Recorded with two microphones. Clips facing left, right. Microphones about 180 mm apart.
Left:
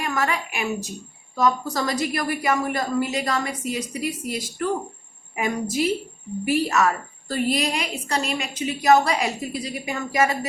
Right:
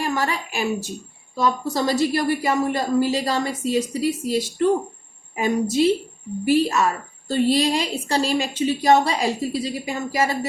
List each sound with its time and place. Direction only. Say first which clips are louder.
0.0 s a woman's voice: right 1 dB; 30° right (ahead or behind)
5.8 s a woman's voice: right 4 dB; 30° right (ahead or behind)